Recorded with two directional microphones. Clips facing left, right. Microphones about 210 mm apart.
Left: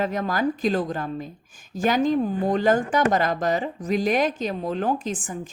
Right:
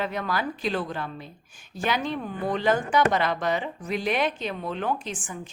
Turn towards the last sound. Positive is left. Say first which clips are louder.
# left 5 dB
turn(degrees=40)  # may be behind; listen again after turning